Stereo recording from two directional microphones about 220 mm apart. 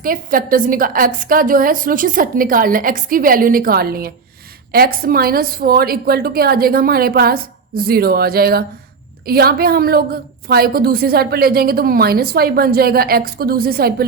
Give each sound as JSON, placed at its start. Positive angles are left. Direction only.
{"t": 0.0, "sound": "a woman's voice", "side_deg": -40}